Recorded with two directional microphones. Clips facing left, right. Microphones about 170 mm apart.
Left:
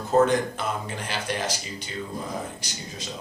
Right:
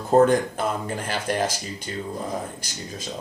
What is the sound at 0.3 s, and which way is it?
Speech, 50° right (ahead or behind).